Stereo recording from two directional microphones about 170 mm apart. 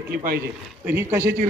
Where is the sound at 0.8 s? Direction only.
15° right (ahead or behind).